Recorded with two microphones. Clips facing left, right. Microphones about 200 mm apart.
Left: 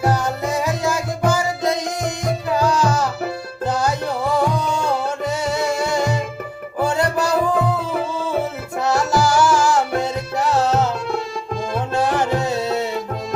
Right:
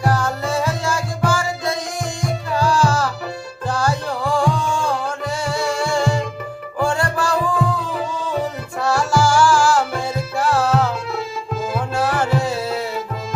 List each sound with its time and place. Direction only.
0.0 s music: 20° left (ahead or behind)
8.8 s music: 20° left (ahead or behind)
11.9 s music: 20° left (ahead or behind)